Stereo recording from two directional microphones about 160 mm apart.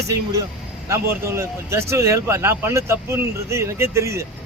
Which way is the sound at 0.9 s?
15° right (ahead or behind).